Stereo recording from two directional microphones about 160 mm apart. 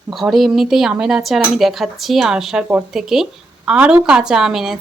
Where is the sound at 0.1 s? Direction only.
Centre (ahead or behind).